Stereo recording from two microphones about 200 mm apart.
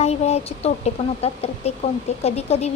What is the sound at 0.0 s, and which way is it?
Speech, 30° left (ahead or behind).